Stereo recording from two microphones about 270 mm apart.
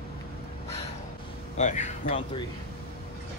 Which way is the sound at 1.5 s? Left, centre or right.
Left.